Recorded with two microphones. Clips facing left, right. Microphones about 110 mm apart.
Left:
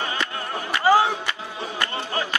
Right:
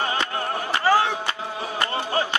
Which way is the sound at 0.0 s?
35° right (ahead or behind).